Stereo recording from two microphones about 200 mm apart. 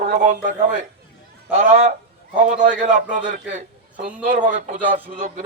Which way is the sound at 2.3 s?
40° right (ahead or behind).